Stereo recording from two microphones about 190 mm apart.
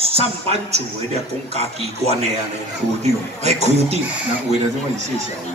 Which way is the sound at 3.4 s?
35° right (ahead or behind).